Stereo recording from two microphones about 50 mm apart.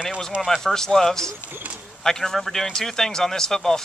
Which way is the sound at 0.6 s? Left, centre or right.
Centre.